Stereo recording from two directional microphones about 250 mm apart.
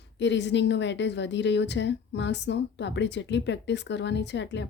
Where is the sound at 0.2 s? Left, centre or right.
Left.